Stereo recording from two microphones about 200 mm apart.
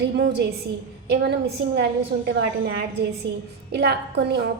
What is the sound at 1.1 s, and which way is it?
Speech, 55° right (ahead or behind).